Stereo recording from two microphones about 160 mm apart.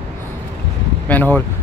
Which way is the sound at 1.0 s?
10° left (ahead or behind).